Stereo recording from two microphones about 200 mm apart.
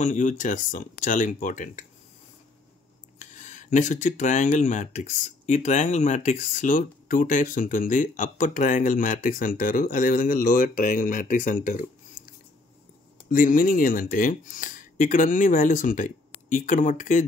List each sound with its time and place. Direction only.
0.0 s speech: 40° left (ahead or behind)
3.2 s speech: 40° left (ahead or behind)
13.3 s speech: 45° left (ahead or behind)